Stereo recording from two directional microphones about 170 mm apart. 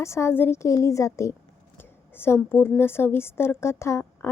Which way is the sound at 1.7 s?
15° left (ahead or behind).